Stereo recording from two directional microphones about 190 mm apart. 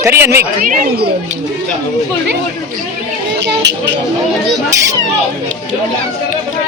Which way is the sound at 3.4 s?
65° right (ahead or behind).